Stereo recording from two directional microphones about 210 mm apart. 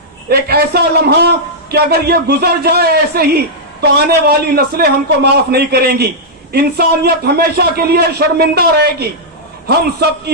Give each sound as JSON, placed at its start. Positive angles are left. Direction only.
{"t": 0.3, "sound": "a man's voice", "side_deg": -50}